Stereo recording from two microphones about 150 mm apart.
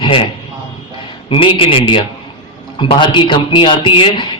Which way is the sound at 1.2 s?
35° left (ahead or behind).